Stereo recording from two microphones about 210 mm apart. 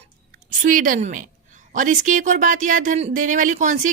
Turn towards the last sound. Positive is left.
turn(degrees=-35)  # may be behind; listen again after turning